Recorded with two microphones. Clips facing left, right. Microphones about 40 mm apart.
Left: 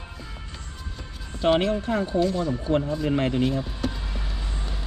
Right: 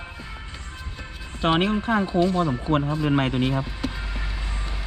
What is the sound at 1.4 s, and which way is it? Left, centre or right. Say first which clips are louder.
Speech: even; right.